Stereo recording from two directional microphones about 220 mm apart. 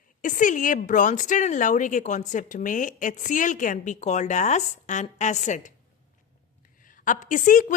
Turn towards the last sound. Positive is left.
turn(degrees=35)  # may be behind; listen again after turning